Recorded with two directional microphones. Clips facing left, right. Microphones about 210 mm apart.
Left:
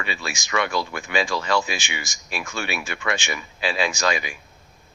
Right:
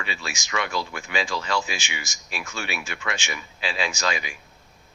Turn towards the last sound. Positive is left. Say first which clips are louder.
# left 4 dB
turn(degrees=55)  # may be behind; listen again after turning